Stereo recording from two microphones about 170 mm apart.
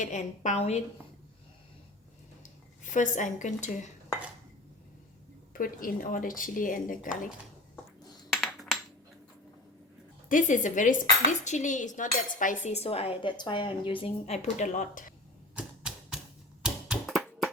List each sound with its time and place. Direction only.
0.0 s speech: 45° left (ahead or behind)
2.9 s speech: 45° left (ahead or behind)
5.5 s speech: 55° left (ahead or behind)
8.3 s a sound: centre (ahead or behind)
10.2 s speech: 50° left (ahead or behind)
11.3 s cutlery: 45° left (ahead or behind)
15.5 s typewriter: 5° right (ahead or behind)
16.6 s a sound: 5° right (ahead or behind)